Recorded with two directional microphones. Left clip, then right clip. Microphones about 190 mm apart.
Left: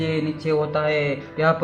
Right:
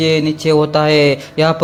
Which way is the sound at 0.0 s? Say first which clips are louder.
Right 10 dB; 45° right (ahead or behind).